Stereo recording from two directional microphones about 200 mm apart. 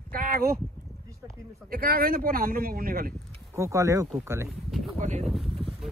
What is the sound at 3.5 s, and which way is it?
Speech, 15° right (ahead or behind).